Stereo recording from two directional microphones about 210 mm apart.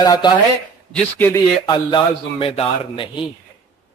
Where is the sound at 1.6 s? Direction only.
20° left (ahead or behind).